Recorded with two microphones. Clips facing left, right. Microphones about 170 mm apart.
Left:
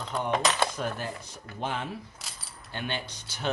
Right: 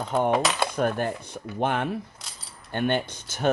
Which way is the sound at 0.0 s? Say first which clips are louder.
Right 5 dB; 50° right (ahead or behind).